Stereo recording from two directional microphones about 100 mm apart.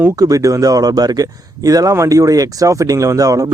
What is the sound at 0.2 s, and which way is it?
Speech, 35° right (ahead or behind).